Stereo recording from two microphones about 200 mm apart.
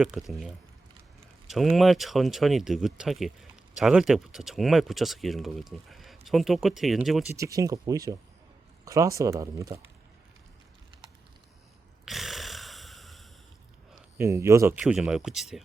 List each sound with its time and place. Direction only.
0.0 s speech: centre (ahead or behind)
7.3 s speech: 15° right (ahead or behind)
12.0 s snoring: centre (ahead or behind)
14.2 s speech: 15° right (ahead or behind)